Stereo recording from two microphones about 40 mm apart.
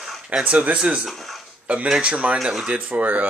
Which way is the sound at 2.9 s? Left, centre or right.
Right.